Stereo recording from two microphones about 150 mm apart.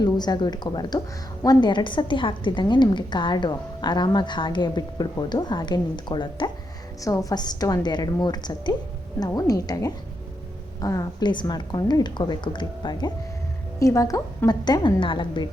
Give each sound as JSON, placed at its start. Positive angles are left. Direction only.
{"t": 0.0, "sound": "a woman's voice", "side_deg": 25}